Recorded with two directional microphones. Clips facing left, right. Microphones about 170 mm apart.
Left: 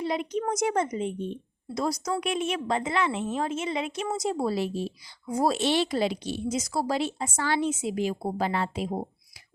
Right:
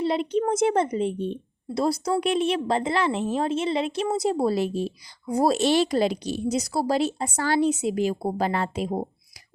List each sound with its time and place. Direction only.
0.0 s a woman's voice: 30° right (ahead or behind); by 9.0 s 45° right (ahead or behind)